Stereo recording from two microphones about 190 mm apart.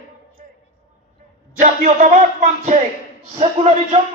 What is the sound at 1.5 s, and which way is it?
Speech, 40° right (ahead or behind).